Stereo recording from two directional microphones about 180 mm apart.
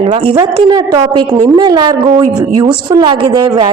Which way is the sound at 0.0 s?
30° right (ahead or behind).